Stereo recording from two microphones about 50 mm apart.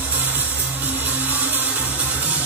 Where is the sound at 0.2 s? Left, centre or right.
Right.